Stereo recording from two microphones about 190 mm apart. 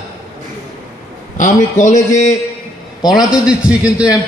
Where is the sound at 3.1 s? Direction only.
5° right (ahead or behind).